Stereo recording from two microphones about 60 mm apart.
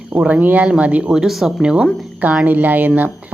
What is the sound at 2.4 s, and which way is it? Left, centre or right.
Speech, right.